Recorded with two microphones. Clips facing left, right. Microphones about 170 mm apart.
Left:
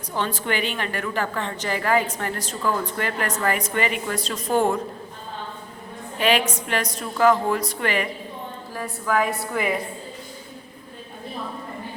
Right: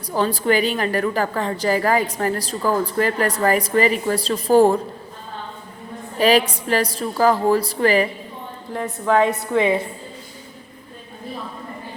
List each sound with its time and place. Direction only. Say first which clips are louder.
0.1 s a woman's voice: right 7 dB; 35° right (ahead or behind)
6.1 s a woman's voice: right 5 dB; 35° right (ahead or behind)
8.7 s a woman's voice: right 5 dB; 25° right (ahead or behind)